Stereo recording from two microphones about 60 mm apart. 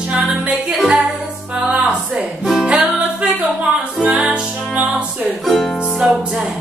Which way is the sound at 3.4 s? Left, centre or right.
Right.